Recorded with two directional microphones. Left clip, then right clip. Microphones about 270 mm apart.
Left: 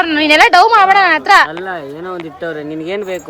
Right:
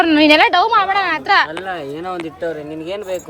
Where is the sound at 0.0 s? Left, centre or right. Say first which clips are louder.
Left 2 dB; centre.